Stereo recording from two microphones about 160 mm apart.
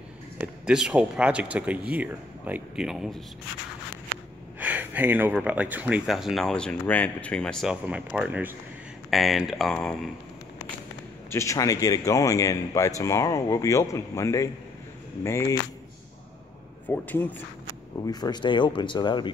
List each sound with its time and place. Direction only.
0.4 s speech: 5° right (ahead or behind)
9.1 s speech: centre (ahead or behind)
11.2 s speech: 20° left (ahead or behind)
16.8 s speech: 10° left (ahead or behind)
18.0 s speech: 25° left (ahead or behind)